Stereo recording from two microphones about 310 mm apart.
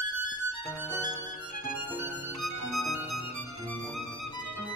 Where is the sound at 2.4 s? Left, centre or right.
Right.